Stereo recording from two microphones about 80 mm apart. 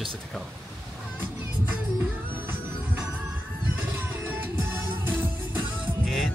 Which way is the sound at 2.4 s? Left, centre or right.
Right.